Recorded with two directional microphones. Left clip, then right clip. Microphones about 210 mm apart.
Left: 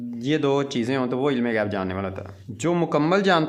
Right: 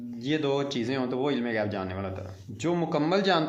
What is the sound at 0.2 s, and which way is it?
Speech, 35° left (ahead or behind).